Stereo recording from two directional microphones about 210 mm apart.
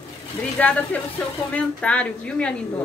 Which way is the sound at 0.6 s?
10° left (ahead or behind).